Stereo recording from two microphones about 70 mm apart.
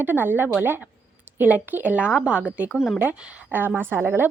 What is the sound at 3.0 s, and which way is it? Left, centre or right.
A woman's voice, right.